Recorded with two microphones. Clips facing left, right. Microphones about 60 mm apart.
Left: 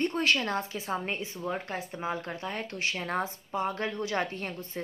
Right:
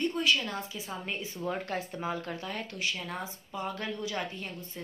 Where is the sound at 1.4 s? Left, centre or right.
Centre.